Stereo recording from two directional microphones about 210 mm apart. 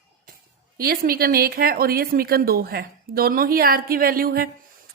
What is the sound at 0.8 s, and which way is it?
Speech, 45° right (ahead or behind).